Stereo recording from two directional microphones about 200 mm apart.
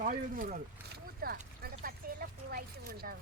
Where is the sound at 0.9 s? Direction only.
50° right (ahead or behind).